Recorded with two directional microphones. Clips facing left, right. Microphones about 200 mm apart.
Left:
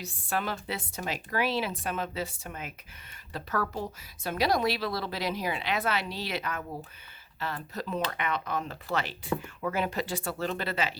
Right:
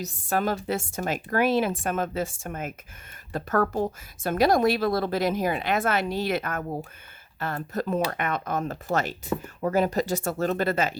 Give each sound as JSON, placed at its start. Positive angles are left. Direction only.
{"t": 0.0, "sound": "a woman's voice", "side_deg": -40}